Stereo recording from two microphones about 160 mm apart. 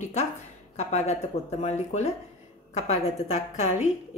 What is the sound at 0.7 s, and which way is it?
A woman's voice, 45° left (ahead or behind).